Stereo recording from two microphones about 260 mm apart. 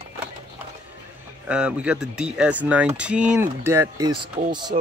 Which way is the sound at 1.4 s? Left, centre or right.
Centre.